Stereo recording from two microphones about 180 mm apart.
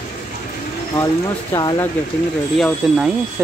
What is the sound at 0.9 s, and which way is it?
Speech, 20° left (ahead or behind).